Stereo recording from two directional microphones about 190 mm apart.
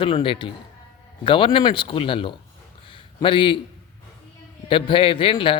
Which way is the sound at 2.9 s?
25° left (ahead or behind).